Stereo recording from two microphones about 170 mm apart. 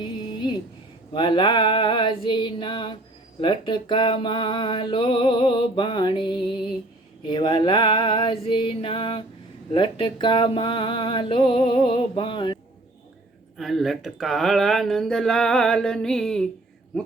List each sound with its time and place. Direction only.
0.0 s a sound: 25° left (ahead or behind)
1.1 s music: 30° left (ahead or behind)
13.6 s speech: centre (ahead or behind)